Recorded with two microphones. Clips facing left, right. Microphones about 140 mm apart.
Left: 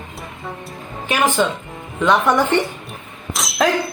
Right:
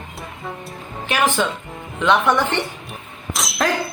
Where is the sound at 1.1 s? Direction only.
15° left (ahead or behind).